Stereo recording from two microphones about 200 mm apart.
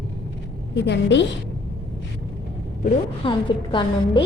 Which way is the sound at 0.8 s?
60° left (ahead or behind).